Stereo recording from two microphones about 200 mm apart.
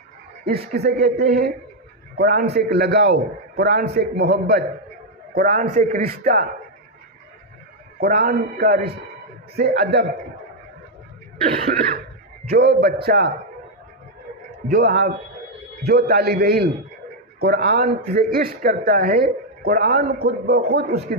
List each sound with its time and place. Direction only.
0.4 s a man's voice: 50° right (ahead or behind)
5.3 s a man's voice: 40° right (ahead or behind)
7.9 s a man's voice: 50° right (ahead or behind)
11.4 s a man's voice: 40° right (ahead or behind)
12.5 s a man's voice: 55° right (ahead or behind)
14.7 s a man's voice: 55° right (ahead or behind)